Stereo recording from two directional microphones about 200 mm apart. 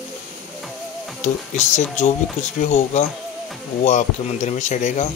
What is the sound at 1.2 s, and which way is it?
Speech, 35° left (ahead or behind).